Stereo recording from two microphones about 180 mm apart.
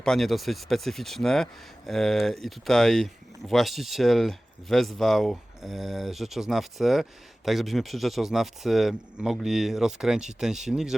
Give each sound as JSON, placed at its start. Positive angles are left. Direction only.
{"t": 0.0, "sound": "speech", "side_deg": 0}